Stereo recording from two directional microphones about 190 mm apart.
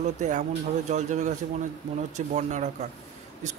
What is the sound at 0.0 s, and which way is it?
Speech, 40° right (ahead or behind).